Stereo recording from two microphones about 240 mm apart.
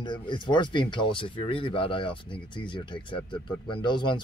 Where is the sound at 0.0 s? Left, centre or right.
Centre.